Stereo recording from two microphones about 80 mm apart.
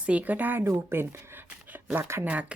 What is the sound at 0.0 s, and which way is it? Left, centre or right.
Speech, centre.